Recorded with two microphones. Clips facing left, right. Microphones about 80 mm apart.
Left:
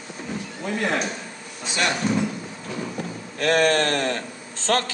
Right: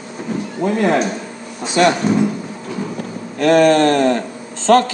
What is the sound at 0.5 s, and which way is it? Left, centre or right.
Speech, right.